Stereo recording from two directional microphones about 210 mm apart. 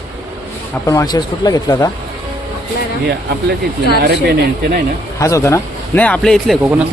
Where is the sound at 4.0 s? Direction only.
50° right (ahead or behind).